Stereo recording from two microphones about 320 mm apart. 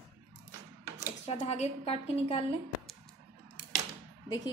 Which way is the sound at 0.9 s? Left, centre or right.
Centre.